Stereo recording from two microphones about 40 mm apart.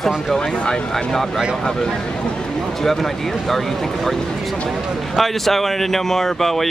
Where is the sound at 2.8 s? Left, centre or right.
Centre.